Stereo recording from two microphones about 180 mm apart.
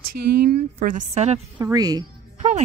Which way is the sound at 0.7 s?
50° right (ahead or behind).